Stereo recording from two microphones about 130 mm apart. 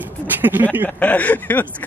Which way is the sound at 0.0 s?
15° right (ahead or behind).